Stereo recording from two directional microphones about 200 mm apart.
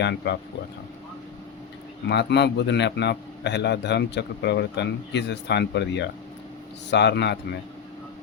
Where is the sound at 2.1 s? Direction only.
60° left (ahead or behind).